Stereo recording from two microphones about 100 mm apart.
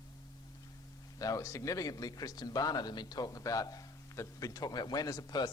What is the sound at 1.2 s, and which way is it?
A man's voice, 35° left (ahead or behind).